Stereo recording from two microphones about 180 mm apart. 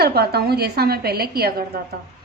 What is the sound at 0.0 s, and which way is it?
A woman's voice, 60° right (ahead or behind).